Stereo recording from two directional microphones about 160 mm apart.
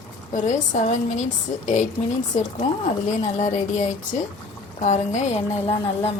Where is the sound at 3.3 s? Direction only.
50° left (ahead or behind).